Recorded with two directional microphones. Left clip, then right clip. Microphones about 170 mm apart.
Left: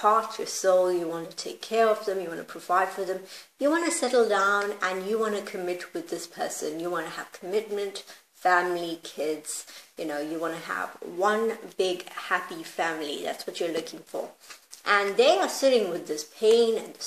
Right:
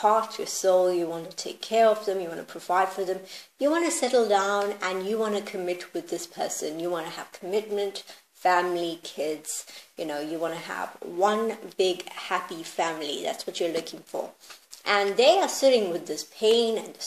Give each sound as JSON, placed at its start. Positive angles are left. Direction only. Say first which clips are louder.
{"t": 0.0, "sound": "speech", "louder": "even", "side_deg": -25}